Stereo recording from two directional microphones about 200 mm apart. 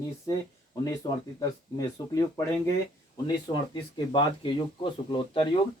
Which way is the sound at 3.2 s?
25° left (ahead or behind).